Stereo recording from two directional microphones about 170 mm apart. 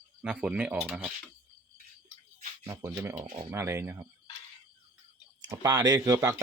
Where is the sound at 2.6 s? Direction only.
15° right (ahead or behind).